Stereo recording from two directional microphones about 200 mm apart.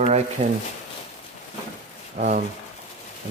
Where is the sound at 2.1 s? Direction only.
40° right (ahead or behind).